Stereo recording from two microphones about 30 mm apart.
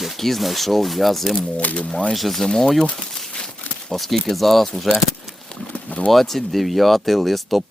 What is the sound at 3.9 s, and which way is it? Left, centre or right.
Speech, centre.